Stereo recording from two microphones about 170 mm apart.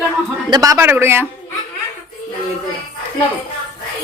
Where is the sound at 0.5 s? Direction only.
20° right (ahead or behind).